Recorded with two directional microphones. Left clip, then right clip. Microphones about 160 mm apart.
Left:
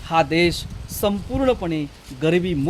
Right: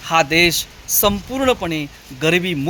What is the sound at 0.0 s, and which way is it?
Speech, 10° right (ahead or behind).